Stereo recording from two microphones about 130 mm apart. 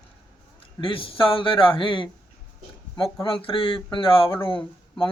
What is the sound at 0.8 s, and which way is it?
Speech, 40° left (ahead or behind).